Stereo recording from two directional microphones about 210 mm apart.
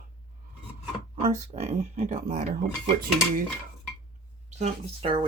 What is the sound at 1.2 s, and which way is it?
Speech, 35° right (ahead or behind).